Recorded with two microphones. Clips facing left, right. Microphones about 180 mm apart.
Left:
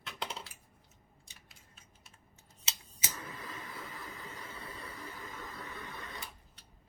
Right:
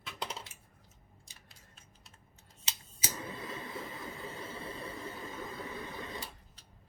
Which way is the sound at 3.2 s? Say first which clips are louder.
Right 4 dB; 25° right (ahead or behind).